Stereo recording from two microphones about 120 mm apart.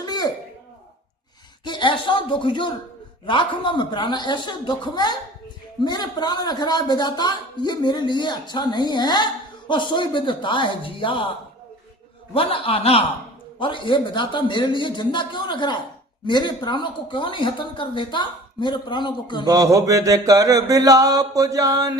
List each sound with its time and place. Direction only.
0.0 s a sound: 35° left (ahead or behind)
1.6 s a man's voice: 40° left (ahead or behind)
12.3 s a man's voice: 50° left (ahead or behind)
19.5 s mantra: 30° right (ahead or behind)